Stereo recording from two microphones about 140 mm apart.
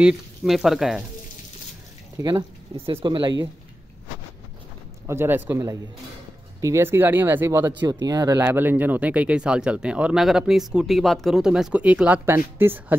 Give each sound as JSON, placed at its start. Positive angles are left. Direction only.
{"t": 0.0, "sound": "speech", "side_deg": 0}
{"t": 2.1, "sound": "speech", "side_deg": -35}
{"t": 5.0, "sound": "speech", "side_deg": -15}
{"t": 6.6, "sound": "speech", "side_deg": -20}
{"t": 7.8, "sound": "speech", "side_deg": -30}
{"t": 8.4, "sound": "speech", "side_deg": -15}